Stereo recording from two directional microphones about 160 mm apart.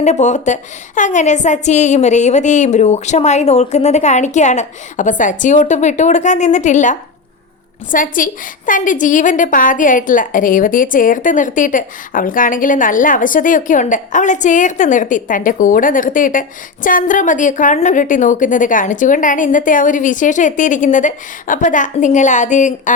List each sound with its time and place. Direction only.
0.0 s a woman's voice: 45° left (ahead or behind)